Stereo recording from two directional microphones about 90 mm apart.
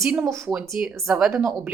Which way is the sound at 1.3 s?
35° right (ahead or behind).